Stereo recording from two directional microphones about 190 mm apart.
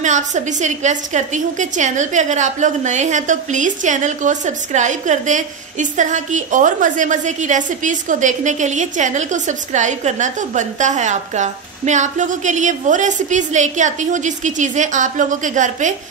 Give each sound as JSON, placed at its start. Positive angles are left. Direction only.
{"t": 0.0, "sound": "a woman's voice", "side_deg": -40}